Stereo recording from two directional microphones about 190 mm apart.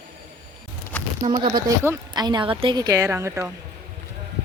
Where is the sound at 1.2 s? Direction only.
25° right (ahead or behind).